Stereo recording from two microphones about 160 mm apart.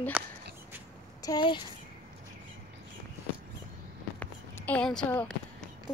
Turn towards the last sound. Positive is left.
turn(degrees=5)  # may be behind; listen again after turning